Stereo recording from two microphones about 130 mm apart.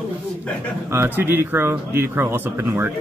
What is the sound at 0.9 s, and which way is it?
Speech, 20° right (ahead or behind).